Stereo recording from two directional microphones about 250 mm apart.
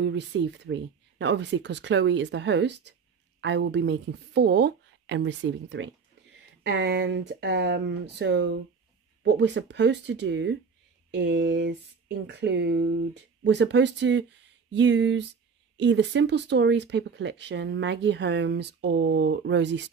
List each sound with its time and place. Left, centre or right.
0.0 s speech: right